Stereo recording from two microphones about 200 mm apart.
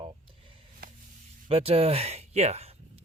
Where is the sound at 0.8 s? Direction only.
50° right (ahead or behind).